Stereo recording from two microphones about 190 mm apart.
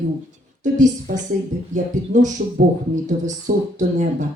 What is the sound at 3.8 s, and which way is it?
Speech, 40° right (ahead or behind).